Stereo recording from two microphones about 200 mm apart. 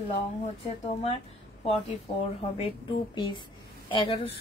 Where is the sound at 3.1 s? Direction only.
20° left (ahead or behind).